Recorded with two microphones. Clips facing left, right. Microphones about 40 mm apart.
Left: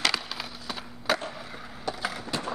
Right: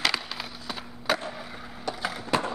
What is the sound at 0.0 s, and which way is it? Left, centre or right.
Skateboard, centre.